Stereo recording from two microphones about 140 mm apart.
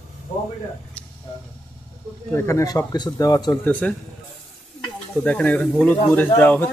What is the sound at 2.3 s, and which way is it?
A man's voice, 20° left (ahead or behind).